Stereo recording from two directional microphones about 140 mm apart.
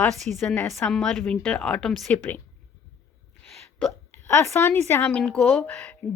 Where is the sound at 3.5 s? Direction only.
Centre (ahead or behind).